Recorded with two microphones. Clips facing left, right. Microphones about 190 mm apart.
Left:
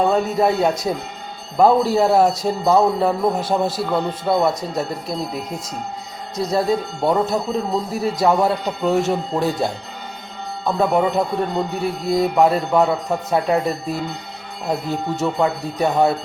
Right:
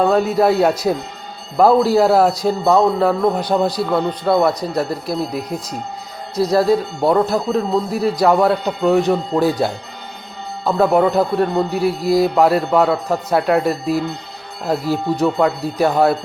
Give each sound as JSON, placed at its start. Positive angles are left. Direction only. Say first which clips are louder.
{"t": 0.1, "sound": "a man's voice", "louder": "right 3 dB", "side_deg": 0}
{"t": 14.6, "sound": "a man's voice", "louder": "right 4 dB", "side_deg": -5}